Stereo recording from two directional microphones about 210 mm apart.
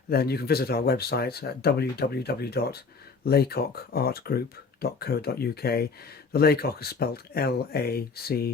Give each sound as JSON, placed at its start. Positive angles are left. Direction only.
{"t": 0.1, "sound": "speech", "side_deg": 50}